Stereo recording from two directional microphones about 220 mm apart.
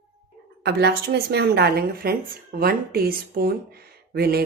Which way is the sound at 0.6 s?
50° right (ahead or behind).